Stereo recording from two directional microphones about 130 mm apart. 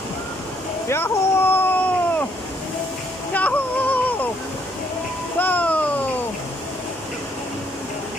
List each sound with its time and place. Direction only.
0.8 s cat: 20° left (ahead or behind)
3.3 s yodeling: 10° left (ahead or behind)
5.4 s a sound: 10° left (ahead or behind)